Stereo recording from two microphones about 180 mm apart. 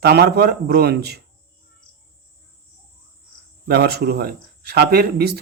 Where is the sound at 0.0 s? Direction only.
60° right (ahead or behind).